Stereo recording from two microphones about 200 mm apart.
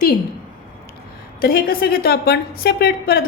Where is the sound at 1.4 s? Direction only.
50° left (ahead or behind).